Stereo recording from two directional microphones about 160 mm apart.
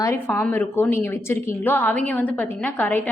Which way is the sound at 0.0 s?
15° left (ahead or behind).